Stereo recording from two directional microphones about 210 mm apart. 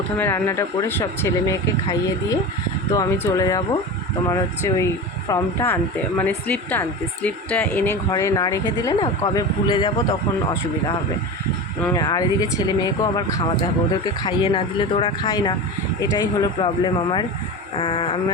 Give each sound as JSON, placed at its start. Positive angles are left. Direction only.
{"t": 0.2, "sound": "speech", "side_deg": 10}
{"t": 11.9, "sound": "speech", "side_deg": 20}
{"t": 14.3, "sound": "speech", "side_deg": 25}